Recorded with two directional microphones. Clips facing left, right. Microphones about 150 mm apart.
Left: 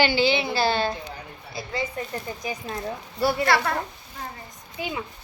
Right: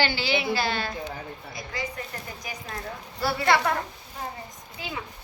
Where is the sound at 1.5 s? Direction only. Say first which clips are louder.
Left 6 dB; 25° left (ahead or behind).